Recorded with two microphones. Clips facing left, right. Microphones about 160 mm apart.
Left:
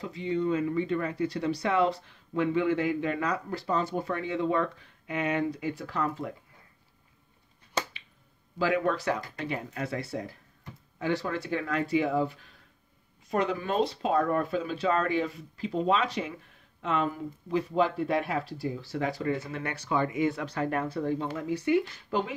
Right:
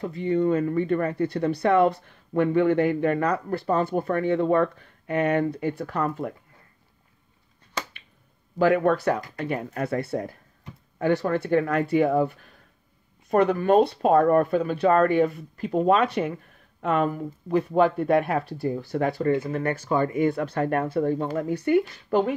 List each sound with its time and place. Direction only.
0.0 s speech: 55° right (ahead or behind)
8.5 s speech: 50° right (ahead or behind)